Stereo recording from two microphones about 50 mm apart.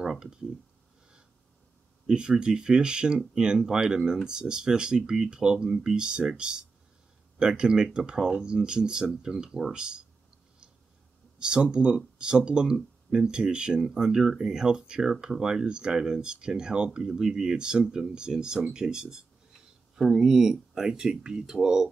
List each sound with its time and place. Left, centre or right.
0.0 s speech: centre
2.0 s speech: centre
11.3 s speech: centre